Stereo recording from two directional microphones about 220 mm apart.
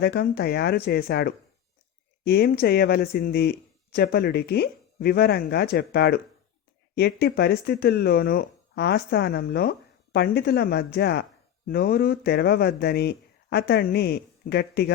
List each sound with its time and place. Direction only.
0.0 s speech: 45° left (ahead or behind)